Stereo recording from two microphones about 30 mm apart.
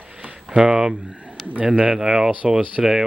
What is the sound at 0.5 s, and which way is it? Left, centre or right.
Speech, right.